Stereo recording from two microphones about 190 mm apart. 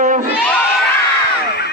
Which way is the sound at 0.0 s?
40° right (ahead or behind).